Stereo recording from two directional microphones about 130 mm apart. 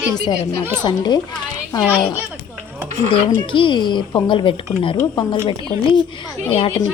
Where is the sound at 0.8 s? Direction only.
35° left (ahead or behind).